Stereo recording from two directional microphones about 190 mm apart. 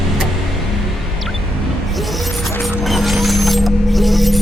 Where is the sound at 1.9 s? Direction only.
Centre (ahead or behind).